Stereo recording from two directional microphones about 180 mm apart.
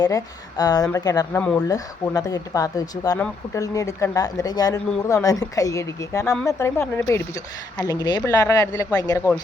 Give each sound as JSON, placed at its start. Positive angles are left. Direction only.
{"t": 0.0, "sound": "speech", "side_deg": 20}
{"t": 1.4, "sound": "speech", "side_deg": 5}
{"t": 1.6, "sound": "speech", "side_deg": 20}